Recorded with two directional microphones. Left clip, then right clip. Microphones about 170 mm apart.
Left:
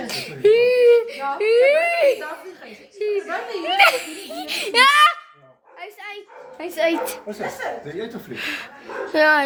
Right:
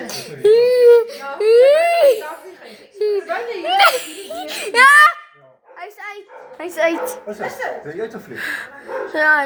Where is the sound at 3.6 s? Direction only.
Centre (ahead or behind).